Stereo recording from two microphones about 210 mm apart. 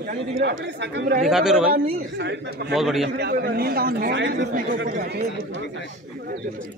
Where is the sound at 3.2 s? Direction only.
50° right (ahead or behind).